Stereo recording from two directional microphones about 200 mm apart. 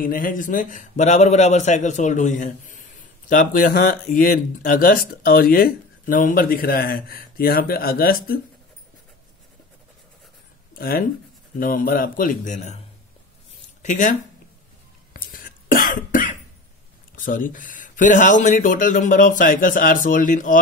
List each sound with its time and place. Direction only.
0.0 s speech: 45° left (ahead or behind)
10.7 s speech: 45° left (ahead or behind)
13.8 s speech: 40° left (ahead or behind)
15.1 s cough: 45° left (ahead or behind)
17.1 s speech: 40° left (ahead or behind)